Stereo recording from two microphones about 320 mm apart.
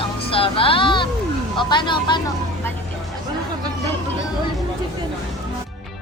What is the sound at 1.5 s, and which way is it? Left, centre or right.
Speech, centre.